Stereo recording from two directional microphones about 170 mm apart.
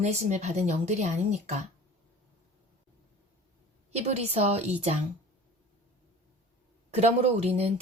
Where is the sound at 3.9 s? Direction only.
40° right (ahead or behind).